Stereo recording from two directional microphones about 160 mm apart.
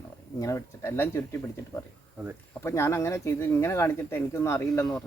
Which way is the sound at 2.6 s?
15° left (ahead or behind).